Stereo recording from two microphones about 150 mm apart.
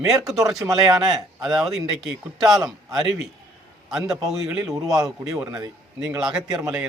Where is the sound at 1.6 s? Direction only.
Centre (ahead or behind).